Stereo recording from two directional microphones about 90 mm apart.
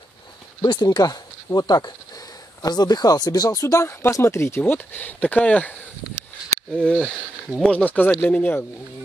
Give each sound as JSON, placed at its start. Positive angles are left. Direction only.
{"t": 0.6, "sound": "speech", "side_deg": 50}
{"t": 7.0, "sound": "speech", "side_deg": -5}
{"t": 7.6, "sound": "speech", "side_deg": 15}